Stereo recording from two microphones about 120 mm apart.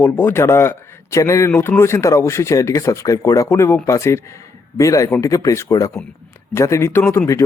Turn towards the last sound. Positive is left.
turn(degrees=20)  # may be behind; listen again after turning